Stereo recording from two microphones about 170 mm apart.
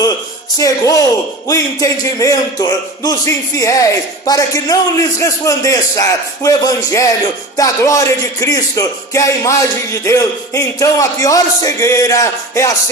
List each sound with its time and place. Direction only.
0.6 s speech: 20° left (ahead or behind)